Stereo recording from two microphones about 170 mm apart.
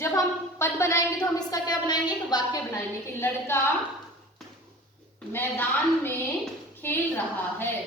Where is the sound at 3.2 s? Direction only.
15° left (ahead or behind).